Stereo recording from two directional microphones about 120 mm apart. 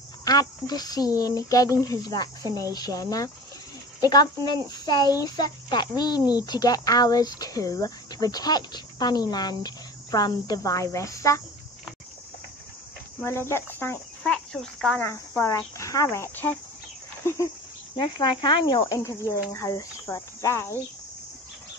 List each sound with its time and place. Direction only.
0.2 s speech: 30° left (ahead or behind)
13.2 s speech: 20° left (ahead or behind)
14.2 s speech: 5° left (ahead or behind)
15.0 s speech: 20° left (ahead or behind)
17.9 s speech: 40° left (ahead or behind)
18.8 s speech: 25° left (ahead or behind)